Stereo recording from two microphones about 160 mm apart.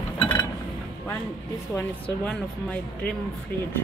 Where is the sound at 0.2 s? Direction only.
30° left (ahead or behind).